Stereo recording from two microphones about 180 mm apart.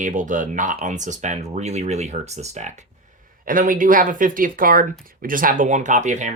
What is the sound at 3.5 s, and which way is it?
Speech, 50° right (ahead or behind).